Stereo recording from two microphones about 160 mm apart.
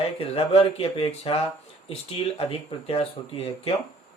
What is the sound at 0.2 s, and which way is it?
Speech, 35° left (ahead or behind).